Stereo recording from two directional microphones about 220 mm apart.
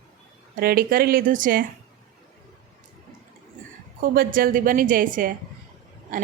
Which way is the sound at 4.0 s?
40° right (ahead or behind).